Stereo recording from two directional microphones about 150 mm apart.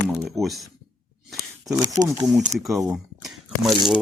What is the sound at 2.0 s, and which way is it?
Speech, 25° right (ahead or behind).